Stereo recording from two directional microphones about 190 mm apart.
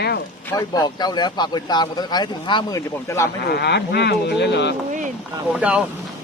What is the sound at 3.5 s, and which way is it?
Speech, 60° left (ahead or behind).